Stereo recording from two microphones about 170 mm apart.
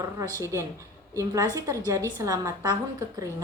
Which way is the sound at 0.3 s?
15° right (ahead or behind).